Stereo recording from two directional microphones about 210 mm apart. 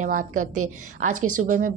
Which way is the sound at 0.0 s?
40° right (ahead or behind).